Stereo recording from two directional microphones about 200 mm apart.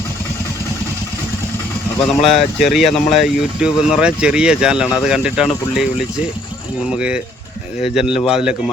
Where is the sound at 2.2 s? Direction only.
30° left (ahead or behind).